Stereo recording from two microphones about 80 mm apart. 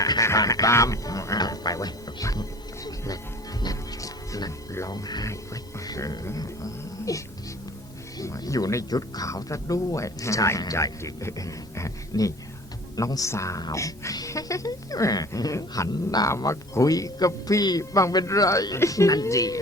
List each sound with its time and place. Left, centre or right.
0.0 s music: left
4.9 s speech: left
8.2 s speech: left
15.9 s speech: left
16.4 s speech: left